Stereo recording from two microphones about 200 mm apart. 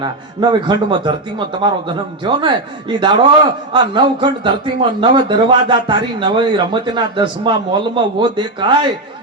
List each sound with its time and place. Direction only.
0.0 s a man's voice: 20° right (ahead or behind)